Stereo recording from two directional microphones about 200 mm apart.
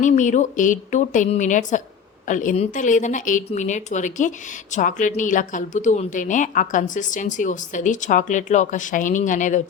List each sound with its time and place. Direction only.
0.0 s a woman's voice: 40° left (ahead or behind)